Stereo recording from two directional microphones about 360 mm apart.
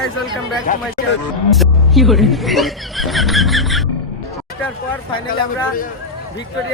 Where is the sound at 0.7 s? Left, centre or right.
Left.